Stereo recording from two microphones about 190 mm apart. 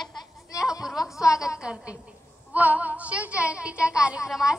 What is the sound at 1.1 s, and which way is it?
Speech, 15° left (ahead or behind).